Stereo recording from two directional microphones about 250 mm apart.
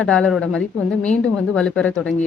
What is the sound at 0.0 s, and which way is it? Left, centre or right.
Speech, centre.